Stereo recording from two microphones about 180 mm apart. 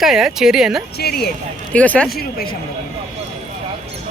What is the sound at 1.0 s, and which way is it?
Speech, 60° left (ahead or behind).